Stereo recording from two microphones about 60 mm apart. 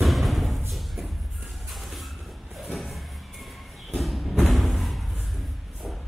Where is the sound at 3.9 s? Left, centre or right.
Centre.